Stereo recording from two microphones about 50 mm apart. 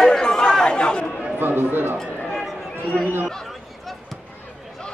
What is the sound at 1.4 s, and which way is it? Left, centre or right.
Speech, right.